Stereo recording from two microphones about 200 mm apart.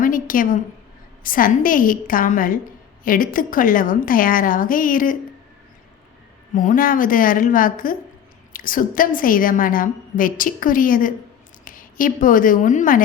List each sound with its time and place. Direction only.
0.0 s a sound: 45° left (ahead or behind)
1.2 s a woman's voice: 45° left (ahead or behind)
6.5 s a woman's voice: 40° left (ahead or behind)